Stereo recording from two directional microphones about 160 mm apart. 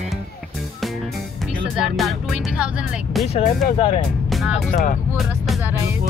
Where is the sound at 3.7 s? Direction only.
35° left (ahead or behind).